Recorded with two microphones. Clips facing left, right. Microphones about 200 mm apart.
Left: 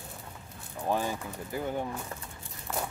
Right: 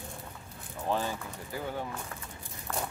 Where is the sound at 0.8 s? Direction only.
15° left (ahead or behind).